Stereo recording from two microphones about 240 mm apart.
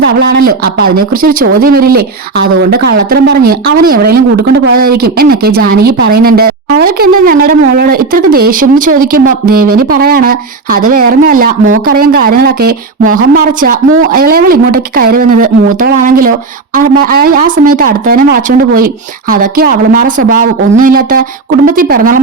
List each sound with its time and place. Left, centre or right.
0.0 s speech: right